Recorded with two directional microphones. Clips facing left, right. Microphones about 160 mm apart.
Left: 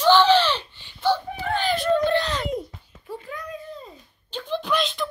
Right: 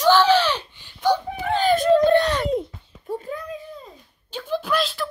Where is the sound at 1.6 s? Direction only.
45° right (ahead or behind).